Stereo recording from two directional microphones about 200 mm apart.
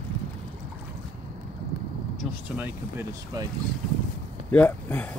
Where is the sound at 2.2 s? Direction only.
5° right (ahead or behind).